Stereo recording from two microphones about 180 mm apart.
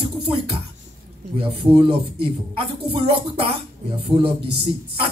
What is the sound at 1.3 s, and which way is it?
Speech, 30° right (ahead or behind).